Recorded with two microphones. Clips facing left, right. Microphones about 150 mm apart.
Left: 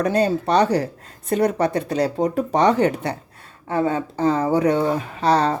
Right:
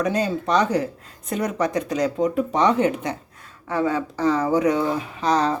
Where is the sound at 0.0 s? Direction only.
35° left (ahead or behind).